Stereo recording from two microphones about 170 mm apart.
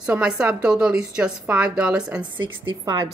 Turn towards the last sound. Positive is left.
turn(degrees=-20)  # may be behind; listen again after turning